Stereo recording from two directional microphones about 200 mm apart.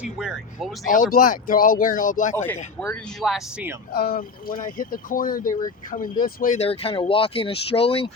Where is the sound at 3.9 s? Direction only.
50° left (ahead or behind); by 8.1 s 30° left (ahead or behind).